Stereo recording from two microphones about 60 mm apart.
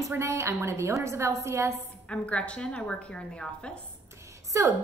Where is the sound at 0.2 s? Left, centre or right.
Right.